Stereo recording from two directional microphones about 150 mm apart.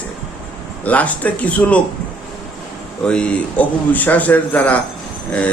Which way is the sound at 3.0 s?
5° left (ahead or behind).